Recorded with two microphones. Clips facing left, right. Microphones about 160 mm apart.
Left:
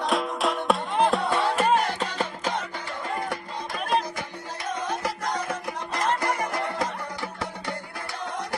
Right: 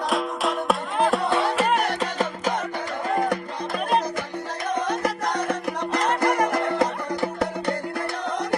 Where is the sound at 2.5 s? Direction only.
45° right (ahead or behind).